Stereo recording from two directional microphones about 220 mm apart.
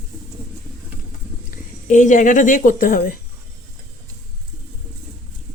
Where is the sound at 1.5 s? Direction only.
35° left (ahead or behind).